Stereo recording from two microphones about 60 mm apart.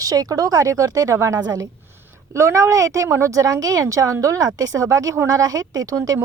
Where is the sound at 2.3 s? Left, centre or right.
Right.